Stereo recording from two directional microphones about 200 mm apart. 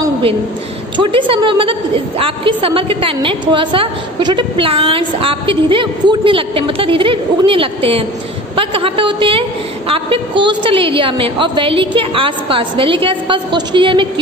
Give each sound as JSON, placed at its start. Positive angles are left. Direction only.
{"t": 0.9, "sound": "a woman's voice", "side_deg": -25}